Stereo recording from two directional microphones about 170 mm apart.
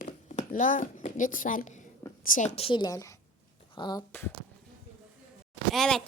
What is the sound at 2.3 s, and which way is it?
A woman's voice, 45° left (ahead or behind).